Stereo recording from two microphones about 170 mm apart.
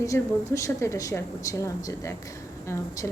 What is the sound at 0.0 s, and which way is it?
A woman's voice, 20° left (ahead or behind).